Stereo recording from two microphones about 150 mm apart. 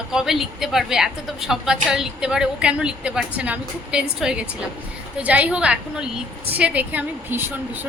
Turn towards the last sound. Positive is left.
turn(degrees=-15)  # may be behind; listen again after turning